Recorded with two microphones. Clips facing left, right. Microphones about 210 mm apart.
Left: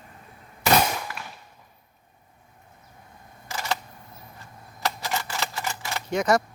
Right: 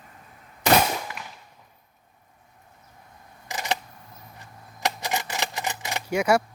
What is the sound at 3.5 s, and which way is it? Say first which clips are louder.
Camera: right 1 dB; 20° right (ahead or behind).